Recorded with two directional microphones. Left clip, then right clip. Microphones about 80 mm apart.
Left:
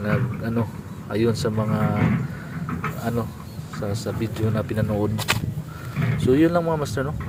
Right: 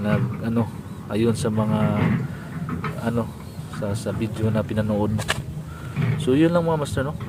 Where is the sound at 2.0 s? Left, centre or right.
Left.